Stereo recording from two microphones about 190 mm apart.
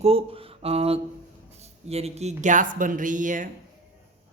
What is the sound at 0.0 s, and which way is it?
Speech, 30° right (ahead or behind).